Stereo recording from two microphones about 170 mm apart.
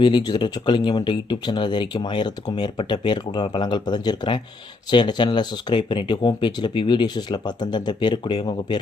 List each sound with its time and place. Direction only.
0.0 s speech: 25° left (ahead or behind)